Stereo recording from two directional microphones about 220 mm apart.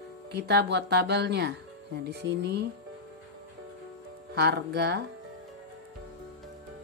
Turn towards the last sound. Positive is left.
turn(degrees=-50)  # may be behind; listen again after turning